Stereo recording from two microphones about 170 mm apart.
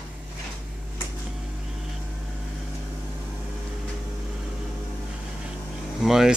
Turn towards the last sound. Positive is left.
turn(degrees=0)  # may be behind; listen again after turning